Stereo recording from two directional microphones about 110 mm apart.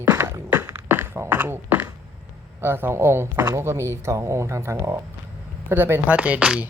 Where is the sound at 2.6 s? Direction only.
20° right (ahead or behind).